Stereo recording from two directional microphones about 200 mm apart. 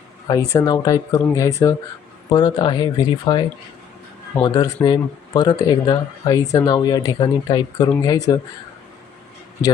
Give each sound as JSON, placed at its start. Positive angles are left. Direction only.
{"t": 0.5, "sound": "speech", "side_deg": 20}
{"t": 4.4, "sound": "speech", "side_deg": 20}